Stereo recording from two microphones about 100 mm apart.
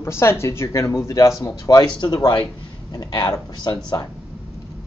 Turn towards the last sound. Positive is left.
turn(degrees=40)  # may be behind; listen again after turning